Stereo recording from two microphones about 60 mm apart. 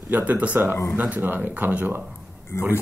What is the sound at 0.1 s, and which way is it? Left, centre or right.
Speech, right.